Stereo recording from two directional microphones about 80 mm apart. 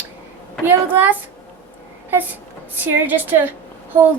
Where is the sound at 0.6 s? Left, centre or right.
Right.